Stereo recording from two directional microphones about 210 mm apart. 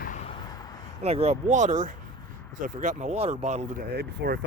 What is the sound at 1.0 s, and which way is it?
Speech, 30° right (ahead or behind).